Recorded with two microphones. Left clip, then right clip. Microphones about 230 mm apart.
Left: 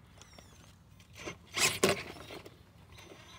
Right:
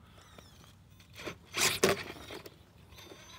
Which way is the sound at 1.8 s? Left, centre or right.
Centre.